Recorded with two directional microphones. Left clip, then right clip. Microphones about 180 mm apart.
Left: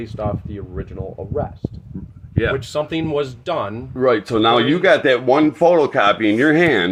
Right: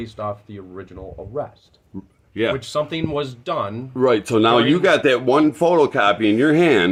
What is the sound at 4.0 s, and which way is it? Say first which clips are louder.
Speech: even; 25° right (ahead or behind).